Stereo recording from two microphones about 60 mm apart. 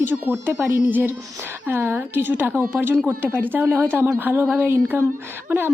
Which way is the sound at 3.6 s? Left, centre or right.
Right.